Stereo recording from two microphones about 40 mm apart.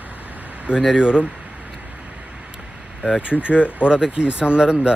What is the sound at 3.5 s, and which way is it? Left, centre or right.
Speech, left.